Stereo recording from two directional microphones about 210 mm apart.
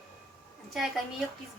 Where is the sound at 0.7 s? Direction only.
Centre (ahead or behind).